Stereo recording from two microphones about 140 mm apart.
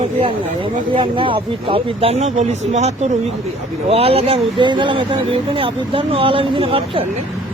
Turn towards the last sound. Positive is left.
turn(degrees=-40)  # may be behind; listen again after turning